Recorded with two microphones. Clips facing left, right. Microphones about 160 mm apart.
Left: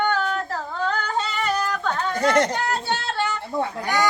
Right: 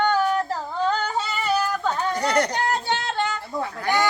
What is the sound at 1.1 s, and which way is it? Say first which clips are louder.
Yodeling: even; 5° right (ahead or behind).